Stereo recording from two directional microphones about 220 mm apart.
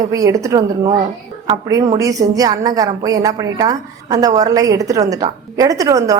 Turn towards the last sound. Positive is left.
turn(degrees=-15)  # may be behind; listen again after turning